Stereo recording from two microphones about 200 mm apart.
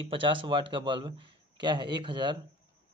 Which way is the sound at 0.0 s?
25° right (ahead or behind).